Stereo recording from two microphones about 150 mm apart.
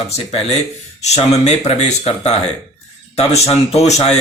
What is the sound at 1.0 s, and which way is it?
Speech, 45° left (ahead or behind).